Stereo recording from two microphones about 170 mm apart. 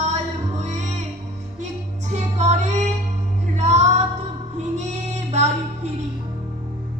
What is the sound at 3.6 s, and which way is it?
Music, 40° right (ahead or behind).